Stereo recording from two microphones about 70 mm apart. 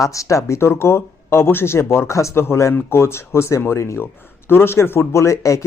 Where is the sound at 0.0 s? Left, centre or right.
Left.